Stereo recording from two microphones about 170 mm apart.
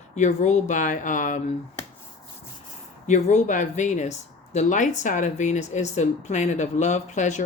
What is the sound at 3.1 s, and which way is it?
Speech, 45° left (ahead or behind).